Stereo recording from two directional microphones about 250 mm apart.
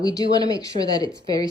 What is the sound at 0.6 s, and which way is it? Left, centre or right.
Speech, centre.